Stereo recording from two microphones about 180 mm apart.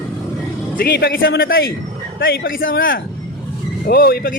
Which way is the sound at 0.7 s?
60° left (ahead or behind).